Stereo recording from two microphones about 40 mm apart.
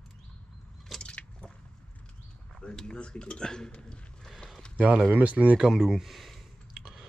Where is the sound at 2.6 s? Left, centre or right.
Left.